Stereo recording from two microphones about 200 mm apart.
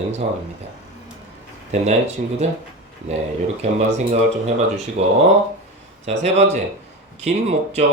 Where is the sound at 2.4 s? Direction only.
35° right (ahead or behind).